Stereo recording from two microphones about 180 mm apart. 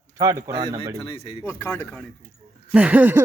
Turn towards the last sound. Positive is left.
turn(degrees=-10)  # may be behind; listen again after turning